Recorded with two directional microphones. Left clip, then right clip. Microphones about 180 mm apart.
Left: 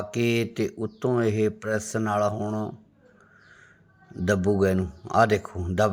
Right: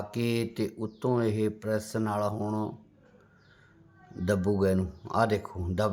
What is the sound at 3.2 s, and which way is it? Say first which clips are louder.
Crow: left 8 dB; 10° left (ahead or behind).